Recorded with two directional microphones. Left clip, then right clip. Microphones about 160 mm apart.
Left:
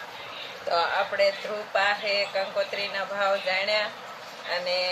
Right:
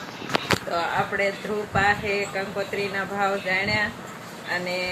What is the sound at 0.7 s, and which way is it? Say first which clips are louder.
Speech: left 7 dB; 30° left (ahead or behind).